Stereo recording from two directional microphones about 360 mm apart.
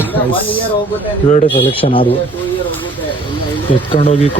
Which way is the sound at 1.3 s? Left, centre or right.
Centre.